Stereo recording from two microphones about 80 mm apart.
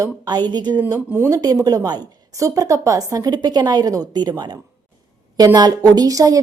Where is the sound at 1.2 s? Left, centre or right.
Right.